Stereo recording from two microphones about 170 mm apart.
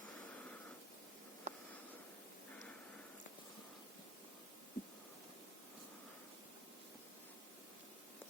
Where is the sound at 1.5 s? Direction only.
45° right (ahead or behind).